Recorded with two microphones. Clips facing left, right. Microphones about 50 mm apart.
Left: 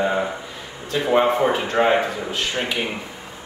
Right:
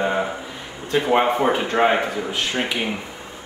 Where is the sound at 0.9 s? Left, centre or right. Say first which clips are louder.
Even; centre.